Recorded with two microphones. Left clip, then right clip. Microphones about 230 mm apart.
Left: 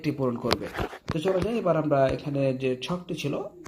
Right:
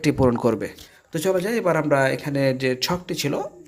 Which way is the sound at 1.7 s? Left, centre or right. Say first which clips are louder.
Right 3 dB; right.